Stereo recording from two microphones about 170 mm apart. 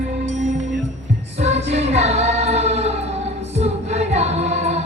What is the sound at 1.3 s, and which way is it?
Music, 40° right (ahead or behind).